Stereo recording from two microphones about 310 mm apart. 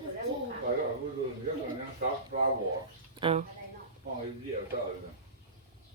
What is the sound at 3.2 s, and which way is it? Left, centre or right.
Speech, centre.